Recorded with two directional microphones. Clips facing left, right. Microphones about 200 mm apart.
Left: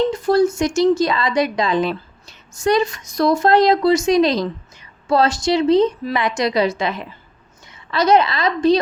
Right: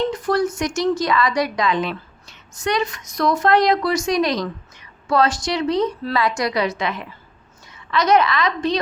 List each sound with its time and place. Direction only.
0.1 s a woman's voice: 25° left (ahead or behind)
6.0 s a woman's voice: 15° left (ahead or behind); by 8.8 s 30° left (ahead or behind)